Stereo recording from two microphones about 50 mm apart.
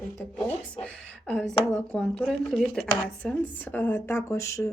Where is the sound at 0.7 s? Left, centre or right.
Left.